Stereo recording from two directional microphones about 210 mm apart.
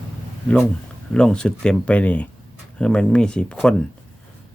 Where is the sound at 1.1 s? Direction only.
5° left (ahead or behind).